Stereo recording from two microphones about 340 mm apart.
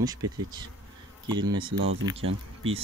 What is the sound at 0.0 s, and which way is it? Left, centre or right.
Speech, centre.